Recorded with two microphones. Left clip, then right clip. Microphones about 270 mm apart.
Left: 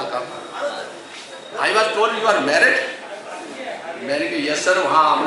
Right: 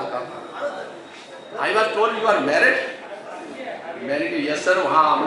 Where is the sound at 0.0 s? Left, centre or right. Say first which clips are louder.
Left 2 dB; centre.